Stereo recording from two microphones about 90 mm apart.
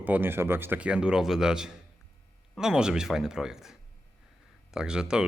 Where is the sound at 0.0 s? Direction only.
20° right (ahead or behind).